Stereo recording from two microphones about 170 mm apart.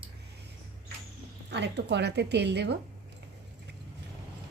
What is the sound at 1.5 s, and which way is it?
A woman's voice, 85° right.